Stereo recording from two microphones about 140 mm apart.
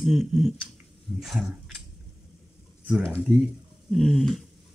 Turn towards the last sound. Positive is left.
turn(degrees=0)  # may be behind; listen again after turning